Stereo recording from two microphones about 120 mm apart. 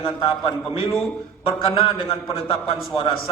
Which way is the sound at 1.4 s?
55° left (ahead or behind).